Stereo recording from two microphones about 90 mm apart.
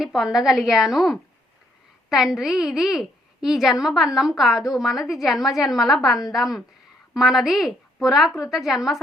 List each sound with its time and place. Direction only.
0.0 s a woman's voice: centre (ahead or behind)